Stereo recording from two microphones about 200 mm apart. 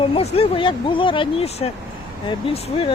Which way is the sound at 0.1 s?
25° left (ahead or behind).